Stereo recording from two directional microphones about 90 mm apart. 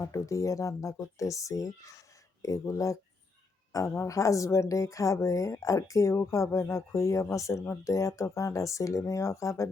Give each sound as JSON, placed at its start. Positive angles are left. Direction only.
{"t": 0.0, "sound": "a woman's voice", "side_deg": 35}